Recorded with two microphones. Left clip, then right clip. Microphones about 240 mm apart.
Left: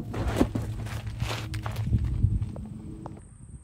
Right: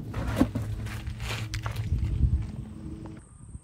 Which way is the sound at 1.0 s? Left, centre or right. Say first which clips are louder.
Left 2 dB; left.